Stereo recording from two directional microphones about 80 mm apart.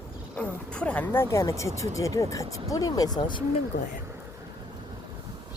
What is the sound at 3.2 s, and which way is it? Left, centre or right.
Speech, left.